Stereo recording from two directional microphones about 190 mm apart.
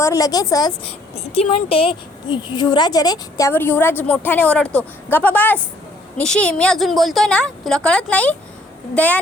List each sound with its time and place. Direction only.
0.0 s a woman's voice: 20° left (ahead or behind)
1.1 s a woman's voice: 30° left (ahead or behind); by 8.4 s 5° left (ahead or behind)